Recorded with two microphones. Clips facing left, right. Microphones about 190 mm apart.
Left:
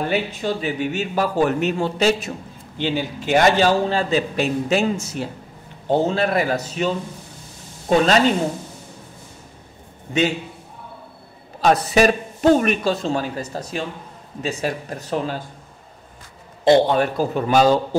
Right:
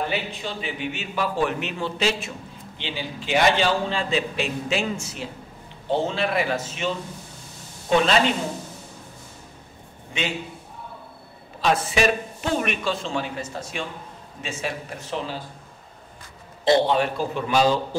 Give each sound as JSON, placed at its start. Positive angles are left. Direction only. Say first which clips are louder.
{"t": 0.1, "sound": "a man's voice", "louder": "left 7 dB", "side_deg": 45}
{"t": 11.6, "sound": "a man's voice", "louder": "left 5 dB", "side_deg": 40}
{"t": 16.6, "sound": "a man's voice", "louder": "left 4 dB", "side_deg": 45}